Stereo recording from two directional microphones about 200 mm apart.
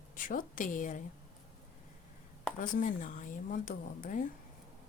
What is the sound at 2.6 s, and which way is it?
Speech, 40° left (ahead or behind).